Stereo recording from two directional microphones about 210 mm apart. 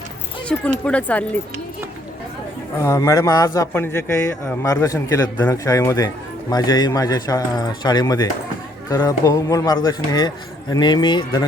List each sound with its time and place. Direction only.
0.5 s speech: 5° left (ahead or behind)
2.7 s speech: 15° left (ahead or behind)